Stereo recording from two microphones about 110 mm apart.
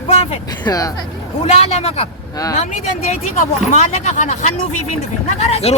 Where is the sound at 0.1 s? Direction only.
70° left (ahead or behind).